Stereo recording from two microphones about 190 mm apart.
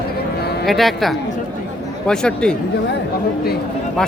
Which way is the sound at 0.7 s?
Centre (ahead or behind).